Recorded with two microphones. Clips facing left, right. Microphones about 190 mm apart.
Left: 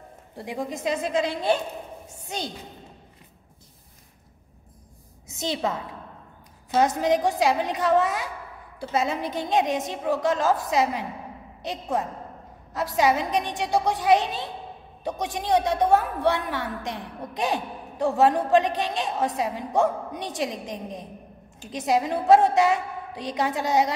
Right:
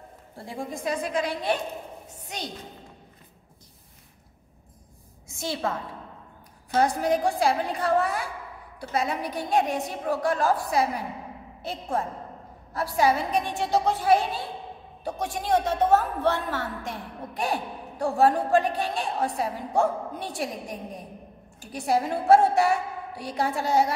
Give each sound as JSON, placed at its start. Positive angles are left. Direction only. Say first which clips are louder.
{"t": 0.5, "sound": "a woman's voice", "louder": "left 3 dB", "side_deg": 20}
{"t": 5.3, "sound": "a woman's voice", "louder": "left 2 dB", "side_deg": 20}
{"t": 6.8, "sound": "a woman's voice", "louder": "left 2 dB", "side_deg": 20}